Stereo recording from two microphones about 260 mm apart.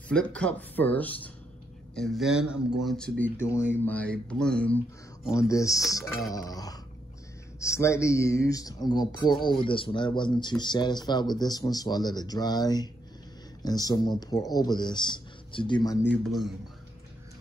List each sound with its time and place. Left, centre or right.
0.1 s speech: centre